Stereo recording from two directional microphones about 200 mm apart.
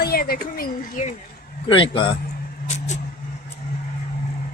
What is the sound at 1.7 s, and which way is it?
Speech, 25° left (ahead or behind).